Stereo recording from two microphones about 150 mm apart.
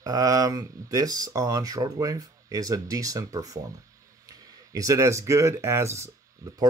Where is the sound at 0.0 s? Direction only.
25° right (ahead or behind).